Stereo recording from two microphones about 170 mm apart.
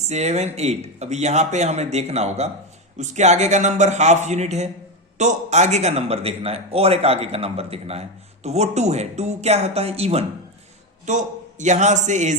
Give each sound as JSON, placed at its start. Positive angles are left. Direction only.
{"t": 0.1, "sound": "a man's voice", "side_deg": -40}